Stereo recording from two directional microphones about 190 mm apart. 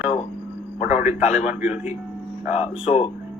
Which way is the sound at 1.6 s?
5° right (ahead or behind).